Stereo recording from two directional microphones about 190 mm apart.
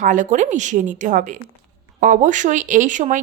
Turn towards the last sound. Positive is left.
turn(degrees=-40)  # may be behind; listen again after turning